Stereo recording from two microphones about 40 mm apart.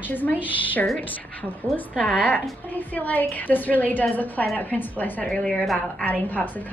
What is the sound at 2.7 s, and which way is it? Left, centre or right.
A woman's voice, left.